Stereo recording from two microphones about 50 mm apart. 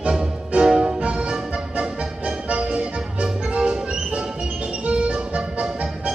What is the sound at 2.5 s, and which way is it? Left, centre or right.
Music, right.